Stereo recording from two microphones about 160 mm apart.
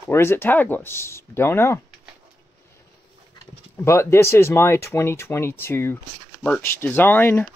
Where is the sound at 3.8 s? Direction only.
15° left (ahead or behind).